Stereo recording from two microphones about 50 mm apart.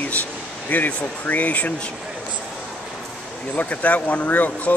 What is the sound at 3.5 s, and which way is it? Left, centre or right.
Speech, left.